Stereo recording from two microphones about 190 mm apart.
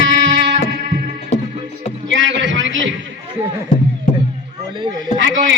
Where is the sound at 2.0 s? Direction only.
80° right.